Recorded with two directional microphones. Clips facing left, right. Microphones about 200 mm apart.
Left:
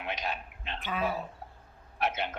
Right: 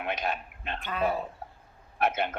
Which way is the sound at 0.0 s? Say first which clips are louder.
Right 4 dB; 50° right (ahead or behind).